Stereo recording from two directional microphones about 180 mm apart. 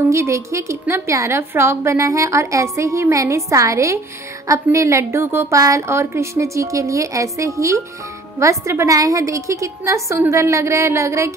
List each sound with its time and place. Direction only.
0.1 s a woman's voice: 15° right (ahead or behind)